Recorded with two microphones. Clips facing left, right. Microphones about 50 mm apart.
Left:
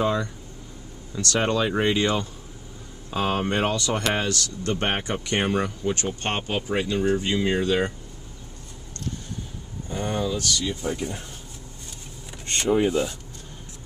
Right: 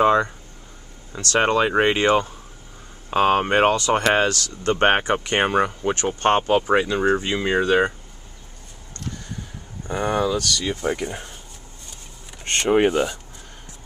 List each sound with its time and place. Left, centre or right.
0.0 s speech: right
1.4 s speech: right
9.8 s speech: right
10.7 s speech: right
12.4 s speech: right